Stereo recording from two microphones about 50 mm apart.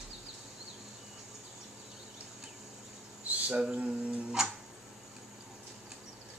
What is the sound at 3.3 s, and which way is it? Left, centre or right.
Speech, centre.